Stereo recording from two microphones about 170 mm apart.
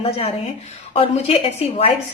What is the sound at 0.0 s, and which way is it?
A woman's voice, 35° left (ahead or behind).